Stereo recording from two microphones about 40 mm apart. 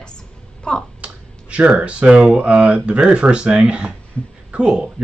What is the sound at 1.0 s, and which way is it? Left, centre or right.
Speech, right.